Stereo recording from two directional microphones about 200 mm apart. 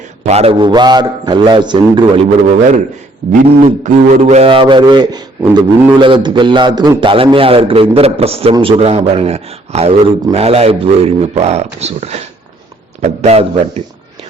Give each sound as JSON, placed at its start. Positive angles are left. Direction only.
{"t": 0.3, "sound": "a man's voice", "side_deg": -30}
{"t": 3.6, "sound": "a man's voice", "side_deg": -35}
{"t": 6.0, "sound": "a man's voice", "side_deg": -25}